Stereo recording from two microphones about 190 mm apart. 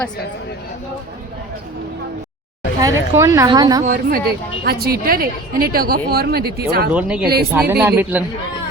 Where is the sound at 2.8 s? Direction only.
15° right (ahead or behind).